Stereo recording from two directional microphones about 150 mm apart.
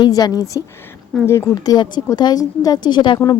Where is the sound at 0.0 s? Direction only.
25° left (ahead or behind).